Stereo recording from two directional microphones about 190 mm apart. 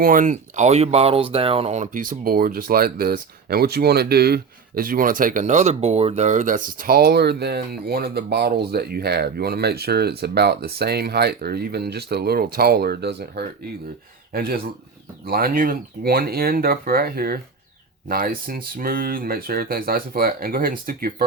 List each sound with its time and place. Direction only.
0.0 s speech: 45° right (ahead or behind)